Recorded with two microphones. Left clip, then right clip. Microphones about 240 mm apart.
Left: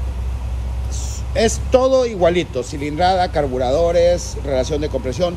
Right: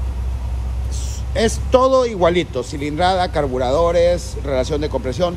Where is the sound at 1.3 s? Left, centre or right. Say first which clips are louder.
Even; centre.